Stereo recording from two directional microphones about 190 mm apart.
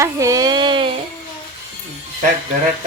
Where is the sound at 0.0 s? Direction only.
15° right (ahead or behind).